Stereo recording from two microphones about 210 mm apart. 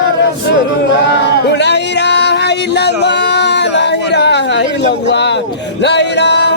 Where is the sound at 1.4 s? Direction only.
55° left (ahead or behind).